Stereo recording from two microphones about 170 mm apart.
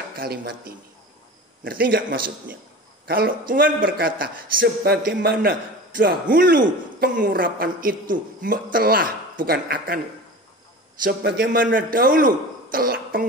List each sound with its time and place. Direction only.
0.1 s a man's voice: 60° right (ahead or behind)
11.1 s a man's voice: 65° right (ahead or behind)
11.7 s a man's voice: 55° right (ahead or behind)